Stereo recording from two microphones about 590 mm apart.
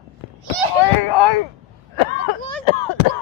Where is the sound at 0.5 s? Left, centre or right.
Right.